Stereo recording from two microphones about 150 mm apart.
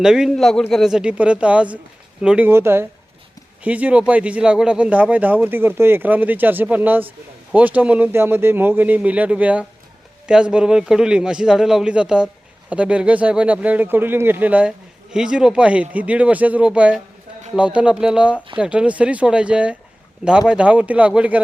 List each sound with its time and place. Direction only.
0.0 s a man's voice: 5° right (ahead or behind)